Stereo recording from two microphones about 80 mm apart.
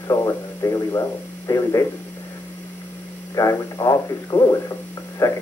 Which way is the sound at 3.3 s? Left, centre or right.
Left.